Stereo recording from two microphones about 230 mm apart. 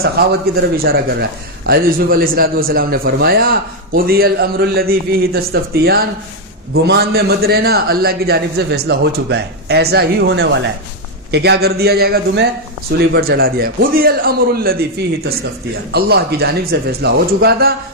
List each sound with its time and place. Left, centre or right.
0.6 s a man's voice: right